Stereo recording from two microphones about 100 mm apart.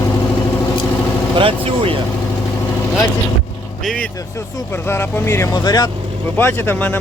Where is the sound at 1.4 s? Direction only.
60° right (ahead or behind).